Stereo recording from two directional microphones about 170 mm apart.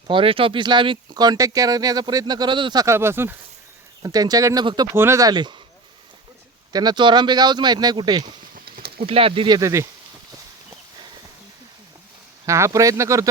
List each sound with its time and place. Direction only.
0.1 s speech: 30° right (ahead or behind)
6.7 s speech: 25° right (ahead or behind)
8.5 s a sound: 65° right (ahead or behind)
9.0 s speech: 35° right (ahead or behind)
9.6 s speech: 20° right (ahead or behind)
12.5 s speech: 15° right (ahead or behind)